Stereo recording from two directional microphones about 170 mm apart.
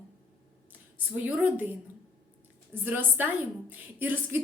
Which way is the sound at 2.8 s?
10° right (ahead or behind).